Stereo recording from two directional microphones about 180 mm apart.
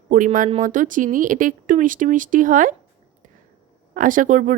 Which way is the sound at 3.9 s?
50° right (ahead or behind).